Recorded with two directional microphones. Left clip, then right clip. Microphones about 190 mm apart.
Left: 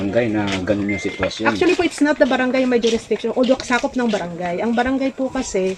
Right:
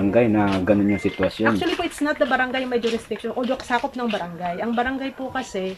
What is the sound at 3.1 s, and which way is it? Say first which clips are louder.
Speech: left 8 dB; 15° right (ahead or behind).